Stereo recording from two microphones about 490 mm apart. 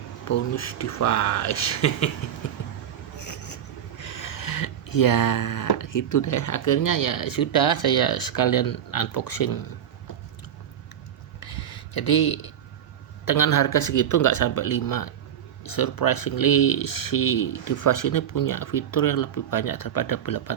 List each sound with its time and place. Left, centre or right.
0.3 s speech: left
3.2 s speech: left
11.3 s a sound: left
13.2 s speech: left